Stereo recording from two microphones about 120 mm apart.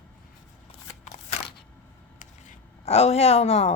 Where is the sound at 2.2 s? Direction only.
75° left (ahead or behind); by 3.7 s 60° left (ahead or behind).